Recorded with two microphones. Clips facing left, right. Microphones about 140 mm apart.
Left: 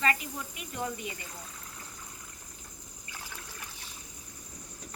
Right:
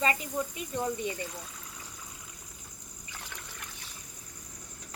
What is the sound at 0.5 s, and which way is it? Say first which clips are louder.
Speech: right 4 dB; 30° right (ahead or behind).